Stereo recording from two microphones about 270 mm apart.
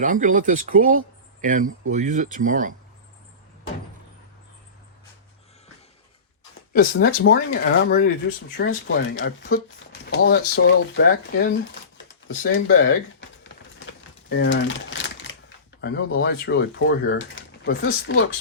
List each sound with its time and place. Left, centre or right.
0.0 s speech: right
6.7 s speech: left
13.7 s crumpling: left
15.8 s speech: left